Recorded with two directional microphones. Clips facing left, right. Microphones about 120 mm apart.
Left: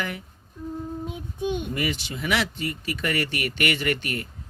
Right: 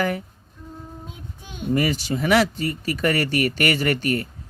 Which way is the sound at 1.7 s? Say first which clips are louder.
Right 7 dB; 40° right (ahead or behind).